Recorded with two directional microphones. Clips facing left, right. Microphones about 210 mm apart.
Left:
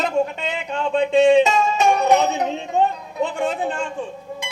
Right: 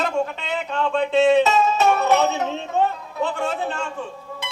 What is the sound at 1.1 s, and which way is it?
Music, 15° left (ahead or behind).